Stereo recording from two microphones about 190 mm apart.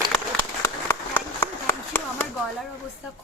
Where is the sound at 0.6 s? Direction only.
15° left (ahead or behind).